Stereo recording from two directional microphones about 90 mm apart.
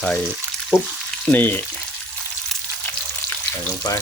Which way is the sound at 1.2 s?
20° left (ahead or behind).